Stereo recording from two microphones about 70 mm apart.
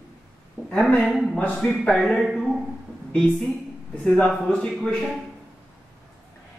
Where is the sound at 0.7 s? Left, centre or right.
Centre.